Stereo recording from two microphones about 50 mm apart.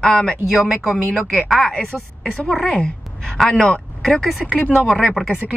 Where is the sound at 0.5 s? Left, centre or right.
Centre.